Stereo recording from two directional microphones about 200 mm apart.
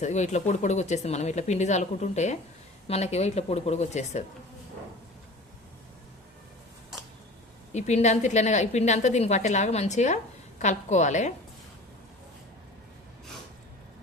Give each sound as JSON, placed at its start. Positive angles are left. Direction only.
{"t": 0.0, "sound": "a woman's voice", "side_deg": 35}
{"t": 7.7, "sound": "a woman's voice", "side_deg": 35}